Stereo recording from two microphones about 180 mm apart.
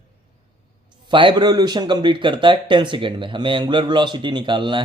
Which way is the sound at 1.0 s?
25° right (ahead or behind).